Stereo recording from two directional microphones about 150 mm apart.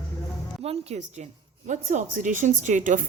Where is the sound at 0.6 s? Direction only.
45° right (ahead or behind).